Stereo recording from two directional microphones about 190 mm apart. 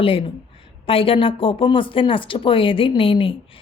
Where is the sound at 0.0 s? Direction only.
30° left (ahead or behind).